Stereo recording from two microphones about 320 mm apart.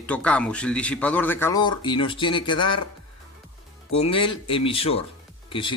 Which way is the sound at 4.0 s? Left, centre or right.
Centre.